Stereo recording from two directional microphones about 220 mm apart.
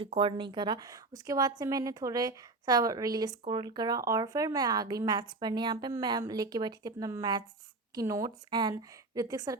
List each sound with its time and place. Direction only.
0.0 s a woman's voice: 25° right (ahead or behind)